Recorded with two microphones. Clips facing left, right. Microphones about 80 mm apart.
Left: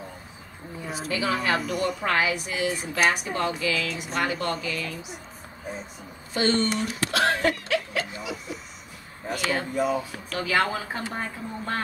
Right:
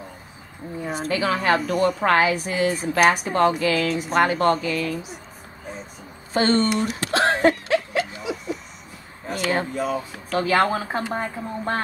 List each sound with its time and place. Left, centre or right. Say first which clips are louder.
1.0 s a woman's voice: right 4 dB; right
6.3 s a woman's voice: right 4 dB; right
6.8 s a sound: right 3 dB; right
9.3 s speech: right 4 dB; right
9.8 s speech: even; centre
10.3 s a woman's voice: right 5 dB; right